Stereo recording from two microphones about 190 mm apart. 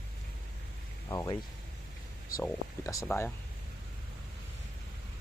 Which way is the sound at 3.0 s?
10° left (ahead or behind).